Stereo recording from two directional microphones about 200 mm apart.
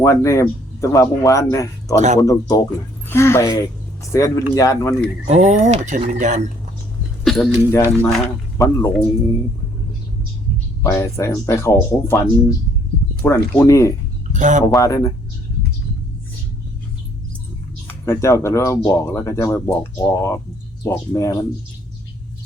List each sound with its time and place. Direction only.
0.0 s speech: 15° left (ahead or behind)
5.3 s speech: 35° right (ahead or behind)
7.3 s a sound: centre (ahead or behind)
7.7 s speech: 15° left (ahead or behind)
10.8 s speech: 15° left (ahead or behind)
14.3 s speech: 40° right (ahead or behind)
14.8 s speech: 15° left (ahead or behind)
17.8 s speech: 15° left (ahead or behind)